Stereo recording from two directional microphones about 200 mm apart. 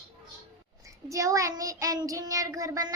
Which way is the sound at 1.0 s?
15° right (ahead or behind).